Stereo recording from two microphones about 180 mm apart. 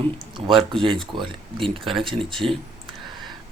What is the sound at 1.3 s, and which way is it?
Speech, 30° right (ahead or behind).